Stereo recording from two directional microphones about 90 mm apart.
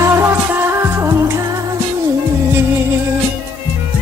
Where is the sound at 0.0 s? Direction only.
30° right (ahead or behind).